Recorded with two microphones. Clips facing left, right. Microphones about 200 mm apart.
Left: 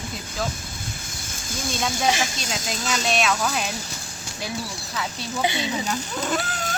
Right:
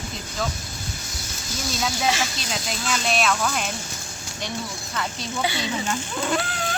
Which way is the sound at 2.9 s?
Centre (ahead or behind).